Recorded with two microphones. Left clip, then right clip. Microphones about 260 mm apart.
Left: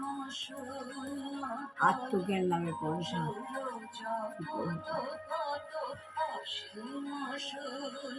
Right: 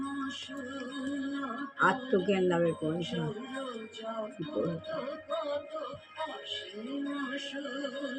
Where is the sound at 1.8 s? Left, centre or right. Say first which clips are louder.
Right 2 dB; centre.